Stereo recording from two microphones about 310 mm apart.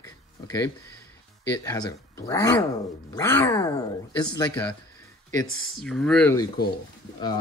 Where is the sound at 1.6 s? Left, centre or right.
Centre.